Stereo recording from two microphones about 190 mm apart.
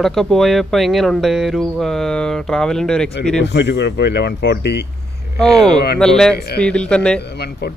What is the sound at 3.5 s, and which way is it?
A man's voice, 65° left (ahead or behind).